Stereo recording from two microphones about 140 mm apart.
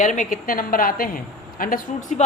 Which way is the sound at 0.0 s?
65° left (ahead or behind).